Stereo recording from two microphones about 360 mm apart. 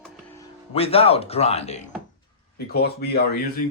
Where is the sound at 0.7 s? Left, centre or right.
Centre.